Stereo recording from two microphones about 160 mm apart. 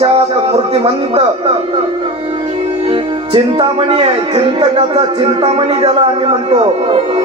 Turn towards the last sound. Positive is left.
turn(degrees=-35)  # may be behind; listen again after turning